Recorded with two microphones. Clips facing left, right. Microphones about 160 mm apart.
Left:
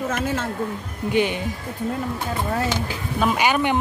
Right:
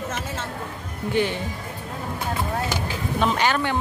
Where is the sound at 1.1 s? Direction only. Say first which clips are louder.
Left 2 dB; 15° left (ahead or behind).